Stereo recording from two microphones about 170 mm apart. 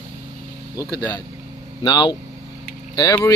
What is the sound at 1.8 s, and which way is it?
Speech, 25° left (ahead or behind).